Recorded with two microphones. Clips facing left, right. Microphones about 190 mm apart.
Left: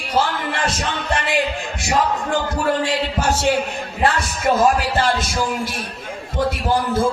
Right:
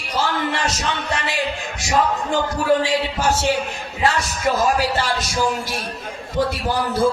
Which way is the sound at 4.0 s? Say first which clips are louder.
Even; 55° left (ahead or behind).